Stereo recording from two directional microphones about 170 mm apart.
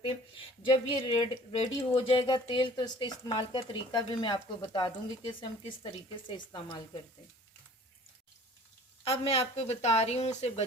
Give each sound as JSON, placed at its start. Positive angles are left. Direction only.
{"t": 0.3, "sound": "speech", "side_deg": 30}
{"t": 9.0, "sound": "speech", "side_deg": 35}